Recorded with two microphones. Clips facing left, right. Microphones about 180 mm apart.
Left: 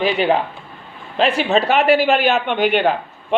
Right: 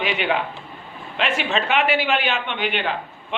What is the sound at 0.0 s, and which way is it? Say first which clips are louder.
Speech: left 6 dB; 35° left (ahead or behind).